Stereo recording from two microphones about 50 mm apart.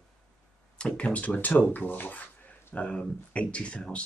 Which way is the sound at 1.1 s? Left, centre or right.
Left.